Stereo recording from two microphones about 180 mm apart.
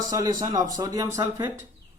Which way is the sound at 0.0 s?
20° right (ahead or behind).